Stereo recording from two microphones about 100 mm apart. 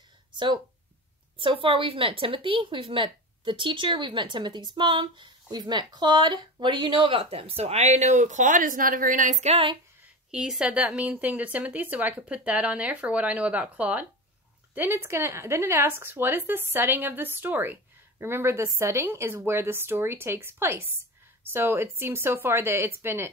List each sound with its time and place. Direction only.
1.4 s a woman's voice: 60° right (ahead or behind); by 8.0 s 90° right
9.4 s a sound: 90° right
10.3 s a woman's voice: 10° right (ahead or behind); by 23.3 s 25° right (ahead or behind)